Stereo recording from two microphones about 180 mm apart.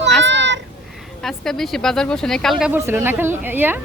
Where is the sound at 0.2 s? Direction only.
85° right.